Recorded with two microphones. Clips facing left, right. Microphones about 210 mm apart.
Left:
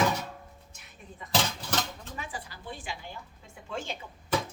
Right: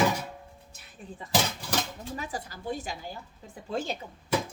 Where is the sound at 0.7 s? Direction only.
35° right (ahead or behind).